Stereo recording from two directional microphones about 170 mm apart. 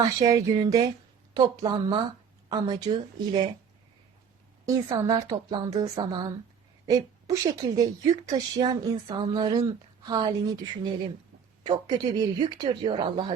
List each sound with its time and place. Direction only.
0.0 s speech: 20° right (ahead or behind)
4.6 s a woman's voice: 20° right (ahead or behind)
11.6 s speech: 25° right (ahead or behind)